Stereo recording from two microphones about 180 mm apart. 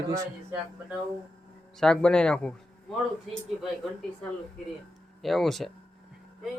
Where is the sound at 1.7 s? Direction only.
5° left (ahead or behind).